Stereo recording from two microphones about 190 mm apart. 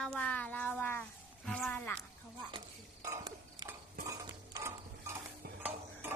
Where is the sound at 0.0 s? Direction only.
5° left (ahead or behind).